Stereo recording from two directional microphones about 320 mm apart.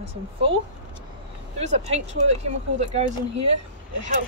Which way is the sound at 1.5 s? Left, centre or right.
Centre.